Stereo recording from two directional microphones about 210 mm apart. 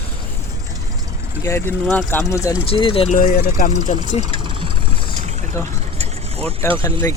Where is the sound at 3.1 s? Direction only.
40° left (ahead or behind).